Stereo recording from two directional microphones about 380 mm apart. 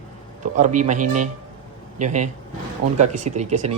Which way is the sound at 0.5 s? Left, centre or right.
Centre.